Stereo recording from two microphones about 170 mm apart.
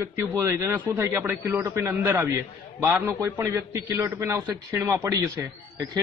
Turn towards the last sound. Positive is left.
turn(degrees=-25)  # may be behind; listen again after turning